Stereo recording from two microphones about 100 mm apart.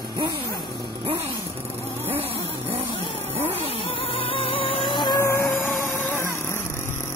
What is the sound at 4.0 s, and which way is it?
Music, 70° left (ahead or behind).